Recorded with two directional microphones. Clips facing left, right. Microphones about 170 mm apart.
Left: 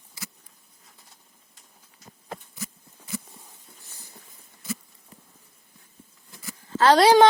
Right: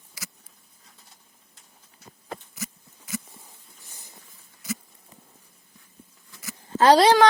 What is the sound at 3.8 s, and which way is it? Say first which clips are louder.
Train: right 3 dB; 15° right (ahead or behind).